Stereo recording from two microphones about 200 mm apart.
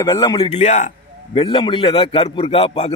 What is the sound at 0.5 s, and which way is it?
A man's voice, 35° left (ahead or behind).